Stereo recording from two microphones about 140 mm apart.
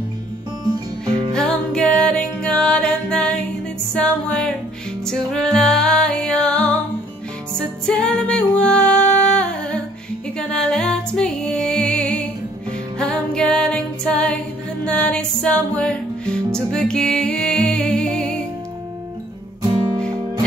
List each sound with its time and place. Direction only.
1.3 s music: 5° left (ahead or behind)
19.6 s music: 30° right (ahead or behind)